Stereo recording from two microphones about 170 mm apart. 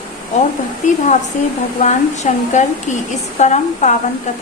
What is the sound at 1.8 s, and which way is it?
A woman's voice, 45° left (ahead or behind).